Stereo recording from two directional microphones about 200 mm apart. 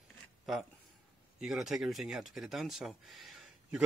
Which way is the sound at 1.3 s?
Centre (ahead or behind).